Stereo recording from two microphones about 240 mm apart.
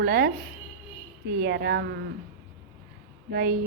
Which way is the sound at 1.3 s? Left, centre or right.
Right.